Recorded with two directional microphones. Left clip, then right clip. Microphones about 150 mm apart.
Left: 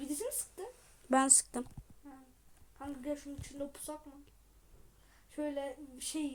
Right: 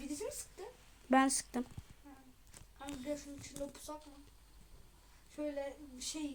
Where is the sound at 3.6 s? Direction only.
25° left (ahead or behind).